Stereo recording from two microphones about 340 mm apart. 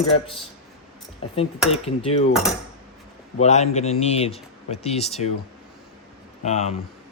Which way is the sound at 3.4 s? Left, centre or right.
Centre.